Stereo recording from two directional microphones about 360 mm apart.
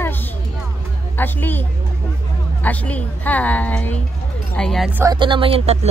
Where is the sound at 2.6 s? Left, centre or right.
Centre.